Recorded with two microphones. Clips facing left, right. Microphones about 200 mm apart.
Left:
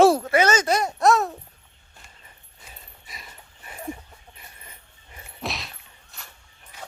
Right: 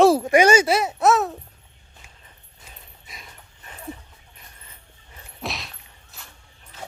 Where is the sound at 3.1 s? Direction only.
Centre (ahead or behind).